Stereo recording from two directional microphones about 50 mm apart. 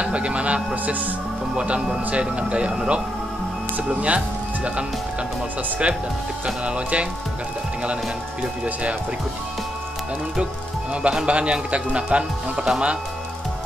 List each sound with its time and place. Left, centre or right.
0.0 s speech: right
6.4 s speech: right
11.0 s speech: right